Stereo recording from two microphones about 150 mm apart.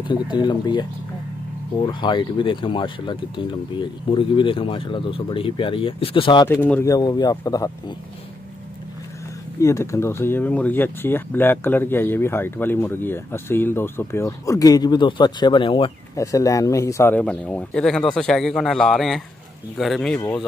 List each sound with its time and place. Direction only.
0.0 s speech: 30° left (ahead or behind)
1.9 s speech: 30° left (ahead or behind)
6.4 s speech: 15° left (ahead or behind)
9.6 s speech: 20° left (ahead or behind)
16.2 s speech: 20° left (ahead or behind); by 20.2 s centre (ahead or behind)